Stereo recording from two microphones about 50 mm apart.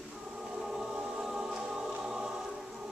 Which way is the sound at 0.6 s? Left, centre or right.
Centre.